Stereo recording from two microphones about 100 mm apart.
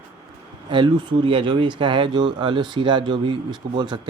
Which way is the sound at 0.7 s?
55° right (ahead or behind).